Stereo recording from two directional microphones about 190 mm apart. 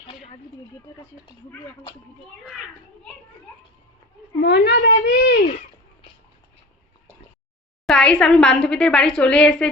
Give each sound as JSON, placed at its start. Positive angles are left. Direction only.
{"t": 2.4, "sound": "a woman's voice", "side_deg": 0}
{"t": 4.4, "sound": "a woman's voice", "side_deg": 65}
{"t": 7.9, "sound": "a woman's voice", "side_deg": 5}